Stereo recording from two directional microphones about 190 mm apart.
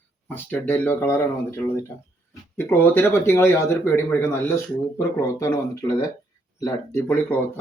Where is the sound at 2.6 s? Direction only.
10° left (ahead or behind).